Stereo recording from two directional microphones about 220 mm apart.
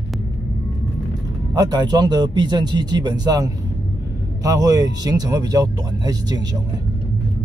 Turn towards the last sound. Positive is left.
turn(degrees=-15)  # may be behind; listen again after turning